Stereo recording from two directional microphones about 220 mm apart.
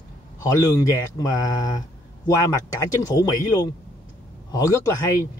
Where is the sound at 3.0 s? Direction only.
15° left (ahead or behind).